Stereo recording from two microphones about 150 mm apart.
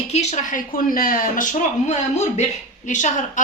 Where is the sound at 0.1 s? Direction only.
45° left (ahead or behind); by 1.5 s 70° left (ahead or behind).